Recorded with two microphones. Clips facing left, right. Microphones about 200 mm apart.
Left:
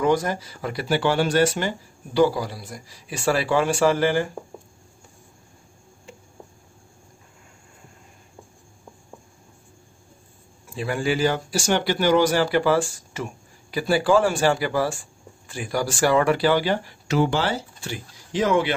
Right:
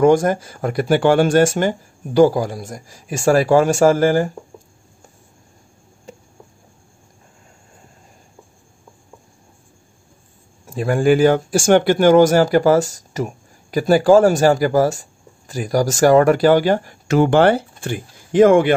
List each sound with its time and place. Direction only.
0.0 s speech: 50° right (ahead or behind)
6.1 s a sound: 40° right (ahead or behind)
10.7 s speech: 45° right (ahead or behind)